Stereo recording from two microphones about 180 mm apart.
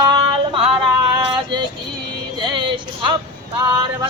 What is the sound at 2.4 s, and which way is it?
Speech, 25° right (ahead or behind).